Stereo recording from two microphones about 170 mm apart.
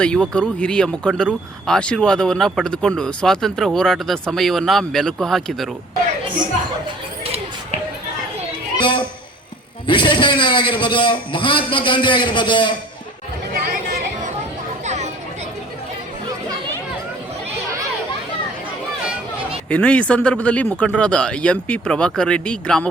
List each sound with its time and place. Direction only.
0.0 s speech: 5° left (ahead or behind)
8.8 s music: 30° left (ahead or behind)
9.8 s a man's voice: 30° left (ahead or behind)
13.5 s chatter: 55° right (ahead or behind)
14.8 s a sound: 45° right (ahead or behind)
19.7 s speech: 5° left (ahead or behind)